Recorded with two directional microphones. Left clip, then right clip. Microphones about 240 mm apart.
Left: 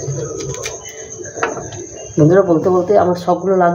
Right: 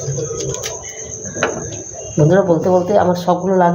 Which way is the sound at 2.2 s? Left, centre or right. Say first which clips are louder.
Left 2 dB; centre.